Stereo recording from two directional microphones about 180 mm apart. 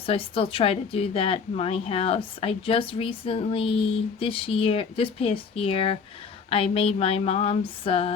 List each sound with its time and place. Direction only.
0.0 s a woman's voice: 30° left (ahead or behind)